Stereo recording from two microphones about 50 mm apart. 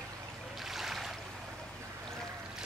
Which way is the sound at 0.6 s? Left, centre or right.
Centre.